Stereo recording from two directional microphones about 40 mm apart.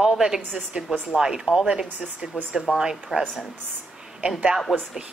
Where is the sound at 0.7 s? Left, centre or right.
Right.